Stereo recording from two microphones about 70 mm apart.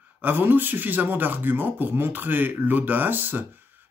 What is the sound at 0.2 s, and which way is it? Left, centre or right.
A man's voice, right.